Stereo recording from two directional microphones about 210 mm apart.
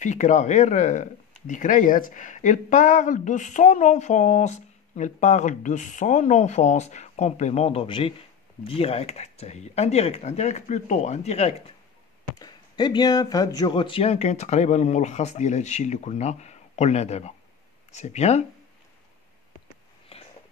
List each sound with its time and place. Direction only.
0.0 s speech: 35° left (ahead or behind)
12.4 s speech: 20° left (ahead or behind)
20.1 s a sound: 30° left (ahead or behind)